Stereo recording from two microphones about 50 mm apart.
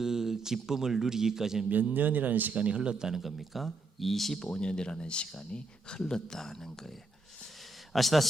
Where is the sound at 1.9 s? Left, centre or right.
Right.